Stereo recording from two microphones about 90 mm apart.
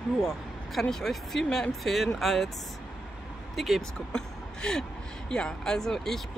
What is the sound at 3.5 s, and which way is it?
Speech, centre (ahead or behind).